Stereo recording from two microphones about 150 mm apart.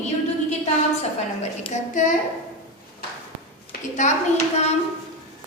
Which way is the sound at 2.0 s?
55° left (ahead or behind).